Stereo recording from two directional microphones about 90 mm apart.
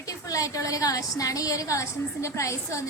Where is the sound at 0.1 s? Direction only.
40° left (ahead or behind).